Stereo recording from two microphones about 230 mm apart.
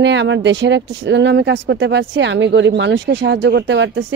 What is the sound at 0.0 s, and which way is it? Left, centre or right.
Speech, right.